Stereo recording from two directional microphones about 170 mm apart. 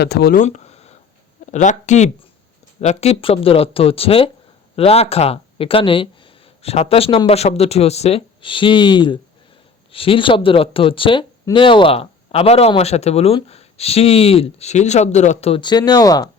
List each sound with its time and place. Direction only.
0.0 s speech: 70° left (ahead or behind)
0.3 s a sound: 45° left (ahead or behind)
1.5 s speech: 45° left (ahead or behind); by 16.3 s 20° left (ahead or behind)